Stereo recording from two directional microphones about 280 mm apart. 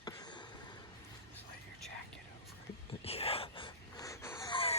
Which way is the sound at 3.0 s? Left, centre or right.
Left.